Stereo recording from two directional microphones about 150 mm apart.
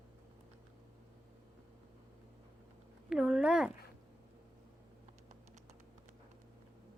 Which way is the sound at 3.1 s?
5° right (ahead or behind).